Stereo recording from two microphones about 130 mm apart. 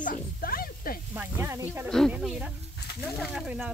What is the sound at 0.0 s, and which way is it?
Snake, 90° left.